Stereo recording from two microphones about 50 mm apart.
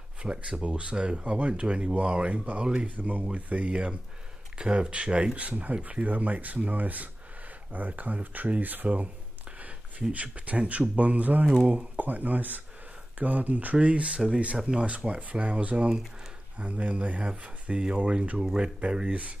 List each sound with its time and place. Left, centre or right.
0.2 s speech: right
3.0 s speech: right
10.1 s speech: right
18.4 s speech: centre